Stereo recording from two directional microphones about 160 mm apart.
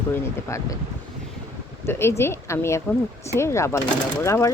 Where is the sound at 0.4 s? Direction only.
20° left (ahead or behind).